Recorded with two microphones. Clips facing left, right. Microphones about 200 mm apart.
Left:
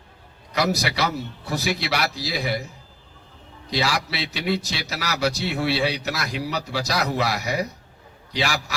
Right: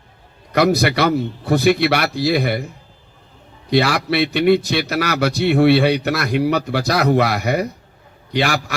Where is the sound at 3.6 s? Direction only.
60° right (ahead or behind).